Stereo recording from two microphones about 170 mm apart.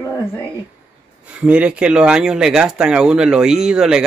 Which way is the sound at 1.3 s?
5° right (ahead or behind).